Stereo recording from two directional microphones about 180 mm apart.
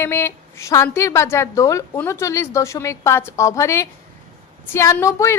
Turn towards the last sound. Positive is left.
turn(degrees=15)  # may be behind; listen again after turning